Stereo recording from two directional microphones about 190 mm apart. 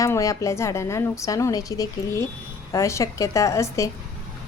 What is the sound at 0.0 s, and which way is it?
A woman's voice, 15° left (ahead or behind).